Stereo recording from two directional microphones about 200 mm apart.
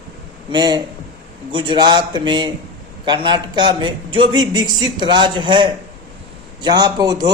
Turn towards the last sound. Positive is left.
turn(degrees=-20)  # may be behind; listen again after turning